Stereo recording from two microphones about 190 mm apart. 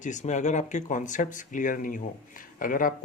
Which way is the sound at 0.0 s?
40° left (ahead or behind).